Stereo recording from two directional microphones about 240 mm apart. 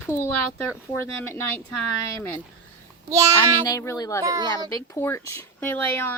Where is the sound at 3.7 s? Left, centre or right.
Centre.